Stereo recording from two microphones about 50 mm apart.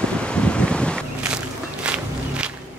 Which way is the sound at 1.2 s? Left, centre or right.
Centre.